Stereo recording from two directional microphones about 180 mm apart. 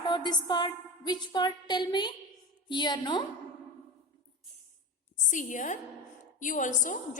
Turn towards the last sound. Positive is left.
turn(degrees=45)  # may be behind; listen again after turning